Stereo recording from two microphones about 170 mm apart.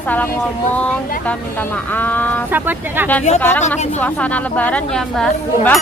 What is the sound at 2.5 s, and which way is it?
Speech, 10° right (ahead or behind).